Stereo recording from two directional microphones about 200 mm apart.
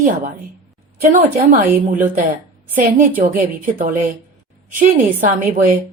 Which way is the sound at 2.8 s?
40° right (ahead or behind).